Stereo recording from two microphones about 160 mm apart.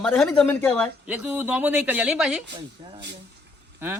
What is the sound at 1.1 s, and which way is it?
Speech, 10° right (ahead or behind).